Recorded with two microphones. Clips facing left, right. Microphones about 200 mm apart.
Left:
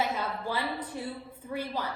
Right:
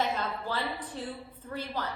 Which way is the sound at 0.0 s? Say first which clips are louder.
Even; 10° left (ahead or behind).